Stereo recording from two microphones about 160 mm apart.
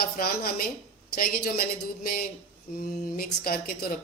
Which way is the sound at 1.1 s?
65° left (ahead or behind).